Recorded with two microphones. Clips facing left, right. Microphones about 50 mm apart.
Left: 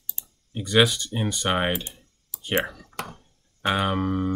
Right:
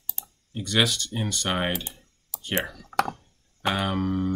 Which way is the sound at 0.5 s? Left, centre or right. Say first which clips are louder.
Left 4 dB; centre.